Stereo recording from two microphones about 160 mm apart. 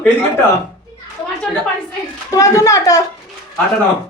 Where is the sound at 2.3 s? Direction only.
20° left (ahead or behind).